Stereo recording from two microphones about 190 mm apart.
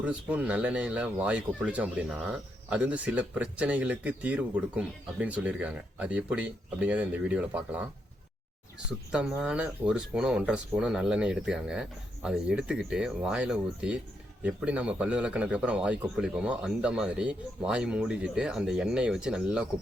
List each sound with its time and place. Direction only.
0.0 s speech: 5° right (ahead or behind)
9.1 s a man's voice: 5° right (ahead or behind)